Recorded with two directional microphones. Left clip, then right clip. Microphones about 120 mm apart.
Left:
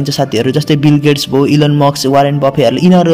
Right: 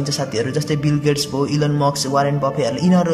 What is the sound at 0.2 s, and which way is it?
Speech, 25° left (ahead or behind).